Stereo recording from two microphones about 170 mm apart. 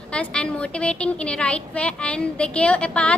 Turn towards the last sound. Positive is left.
turn(degrees=5)  # may be behind; listen again after turning